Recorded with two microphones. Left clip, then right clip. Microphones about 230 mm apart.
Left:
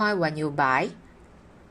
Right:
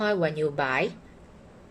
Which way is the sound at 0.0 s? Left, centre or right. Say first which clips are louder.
Even; left.